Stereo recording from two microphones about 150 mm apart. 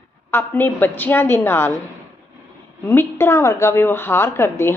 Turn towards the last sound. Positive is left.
turn(degrees=15)  # may be behind; listen again after turning